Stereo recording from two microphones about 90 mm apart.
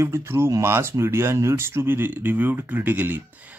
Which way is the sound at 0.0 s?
30° right (ahead or behind).